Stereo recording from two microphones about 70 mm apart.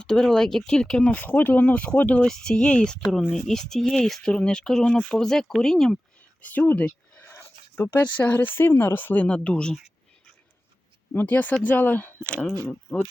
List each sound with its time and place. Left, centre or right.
0.0 s speech: centre
6.4 s a sound: left
7.9 s speech: left
9.2 s speech: centre
11.1 s speech: left